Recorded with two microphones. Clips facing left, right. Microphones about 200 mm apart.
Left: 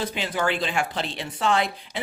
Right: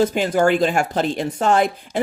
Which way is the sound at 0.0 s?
45° right (ahead or behind).